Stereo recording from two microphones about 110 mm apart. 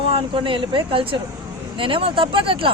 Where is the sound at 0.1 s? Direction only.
50° right (ahead or behind).